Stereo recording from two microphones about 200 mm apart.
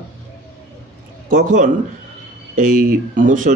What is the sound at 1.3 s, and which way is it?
A man's voice, 40° right (ahead or behind).